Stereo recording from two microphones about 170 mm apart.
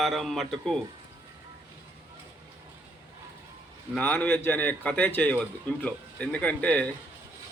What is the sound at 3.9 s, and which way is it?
A man's voice, 10° left (ahead or behind).